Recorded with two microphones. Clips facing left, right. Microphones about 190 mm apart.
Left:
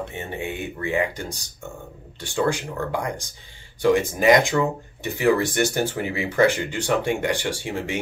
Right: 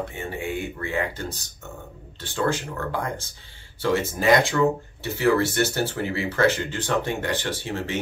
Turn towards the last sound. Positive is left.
turn(degrees=15)  # may be behind; listen again after turning